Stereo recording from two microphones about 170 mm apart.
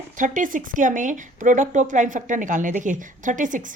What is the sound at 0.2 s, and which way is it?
Speech, 50° right (ahead or behind).